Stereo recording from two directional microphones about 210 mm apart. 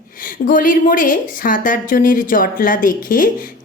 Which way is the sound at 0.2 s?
40° left (ahead or behind).